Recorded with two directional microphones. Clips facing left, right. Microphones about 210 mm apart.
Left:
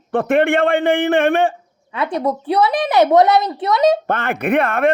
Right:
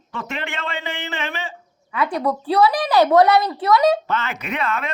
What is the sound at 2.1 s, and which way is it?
A child's voice, 25° left (ahead or behind).